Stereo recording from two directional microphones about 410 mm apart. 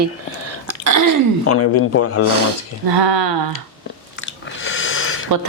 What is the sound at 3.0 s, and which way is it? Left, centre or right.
Speech, right.